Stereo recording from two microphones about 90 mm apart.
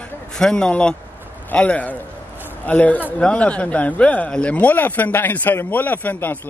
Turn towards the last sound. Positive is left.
turn(degrees=20)  # may be behind; listen again after turning